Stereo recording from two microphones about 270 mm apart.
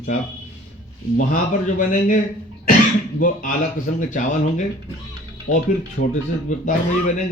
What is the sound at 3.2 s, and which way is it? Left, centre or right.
A man's voice, left.